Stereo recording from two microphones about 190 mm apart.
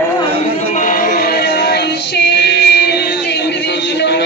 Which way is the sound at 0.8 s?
45° left (ahead or behind).